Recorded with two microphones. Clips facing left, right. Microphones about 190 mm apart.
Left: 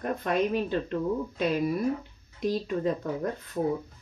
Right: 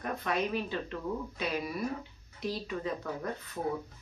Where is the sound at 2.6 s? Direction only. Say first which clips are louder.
Left 7 dB; 45° left (ahead or behind).